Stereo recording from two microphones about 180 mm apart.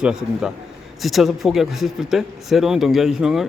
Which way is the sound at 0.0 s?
5° right (ahead or behind).